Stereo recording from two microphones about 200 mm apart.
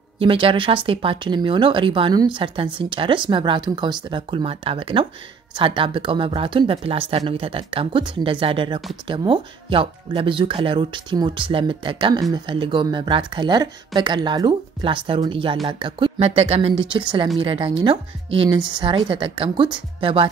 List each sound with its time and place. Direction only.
0.2 s speech: 25° right (ahead or behind)